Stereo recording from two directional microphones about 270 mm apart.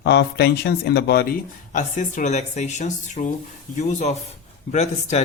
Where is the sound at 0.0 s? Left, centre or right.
Left.